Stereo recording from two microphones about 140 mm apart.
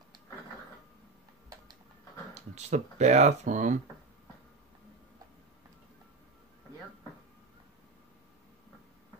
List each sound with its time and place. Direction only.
2.3 s speech: 55° right (ahead or behind)